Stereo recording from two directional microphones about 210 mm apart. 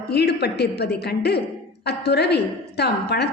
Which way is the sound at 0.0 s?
50° left (ahead or behind).